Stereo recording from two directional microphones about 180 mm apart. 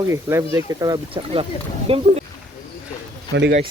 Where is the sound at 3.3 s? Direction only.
70° right (ahead or behind).